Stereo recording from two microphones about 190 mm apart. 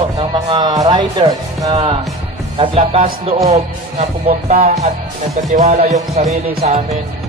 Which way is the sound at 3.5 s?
35° right (ahead or behind).